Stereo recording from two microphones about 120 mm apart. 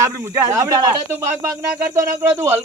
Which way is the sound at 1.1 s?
15° right (ahead or behind).